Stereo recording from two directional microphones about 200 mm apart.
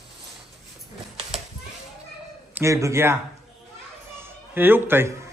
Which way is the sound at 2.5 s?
15° right (ahead or behind).